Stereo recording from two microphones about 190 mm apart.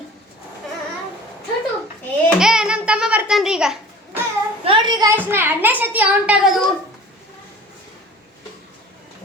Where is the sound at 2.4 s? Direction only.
5° right (ahead or behind).